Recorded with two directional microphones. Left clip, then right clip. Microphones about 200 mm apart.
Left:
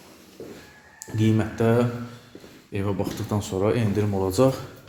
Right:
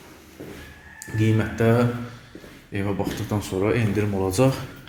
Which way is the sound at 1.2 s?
10° left (ahead or behind).